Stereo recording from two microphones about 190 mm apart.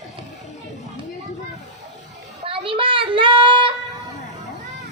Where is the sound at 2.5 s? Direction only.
25° right (ahead or behind).